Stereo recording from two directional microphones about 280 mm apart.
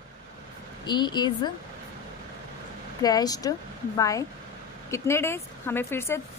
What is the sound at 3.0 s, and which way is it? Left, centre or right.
A woman's voice, centre.